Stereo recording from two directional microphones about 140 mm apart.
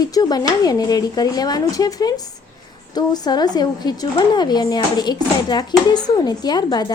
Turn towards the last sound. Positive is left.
turn(degrees=30)  # may be behind; listen again after turning